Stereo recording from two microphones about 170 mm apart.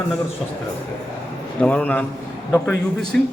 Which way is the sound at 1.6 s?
10° left (ahead or behind).